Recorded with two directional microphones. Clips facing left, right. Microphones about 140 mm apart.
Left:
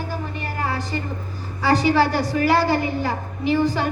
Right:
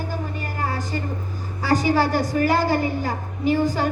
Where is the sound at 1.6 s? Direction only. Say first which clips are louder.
Left 2 dB; 45° right (ahead or behind).